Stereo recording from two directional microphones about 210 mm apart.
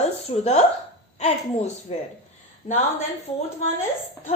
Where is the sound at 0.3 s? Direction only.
30° left (ahead or behind).